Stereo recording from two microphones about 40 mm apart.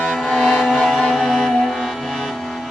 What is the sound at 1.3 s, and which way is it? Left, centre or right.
Music, centre.